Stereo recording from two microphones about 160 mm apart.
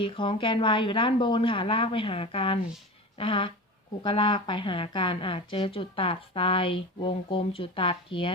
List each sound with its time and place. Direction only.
0.0 s a woman's voice: 30° left (ahead or behind)